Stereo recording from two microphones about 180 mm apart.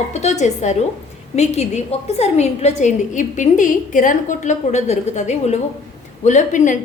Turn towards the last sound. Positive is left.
turn(degrees=45)  # may be behind; listen again after turning